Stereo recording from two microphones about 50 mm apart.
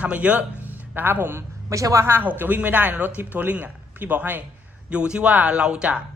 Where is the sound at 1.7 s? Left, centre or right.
Right.